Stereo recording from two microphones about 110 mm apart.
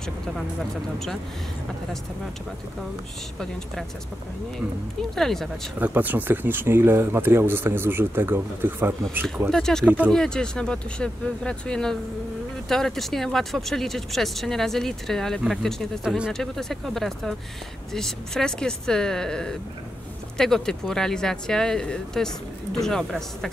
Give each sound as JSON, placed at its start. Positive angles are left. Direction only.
{"t": 5.1, "sound": "speech", "side_deg": 5}
{"t": 5.8, "sound": "speech", "side_deg": -15}
{"t": 9.5, "sound": "speech", "side_deg": 5}
{"t": 9.8, "sound": "speech", "side_deg": -15}
{"t": 10.1, "sound": "speech", "side_deg": 5}